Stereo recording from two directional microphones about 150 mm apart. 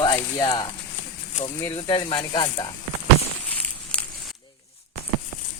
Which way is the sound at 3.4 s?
10° left (ahead or behind).